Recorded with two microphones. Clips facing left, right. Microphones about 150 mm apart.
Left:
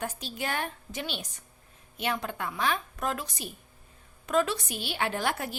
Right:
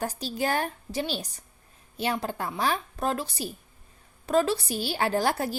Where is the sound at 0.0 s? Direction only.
35° right (ahead or behind).